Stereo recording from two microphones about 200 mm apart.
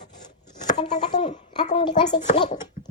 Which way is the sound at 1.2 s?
30° left (ahead or behind).